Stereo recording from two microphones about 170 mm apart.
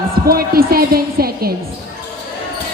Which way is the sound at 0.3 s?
60° right (ahead or behind).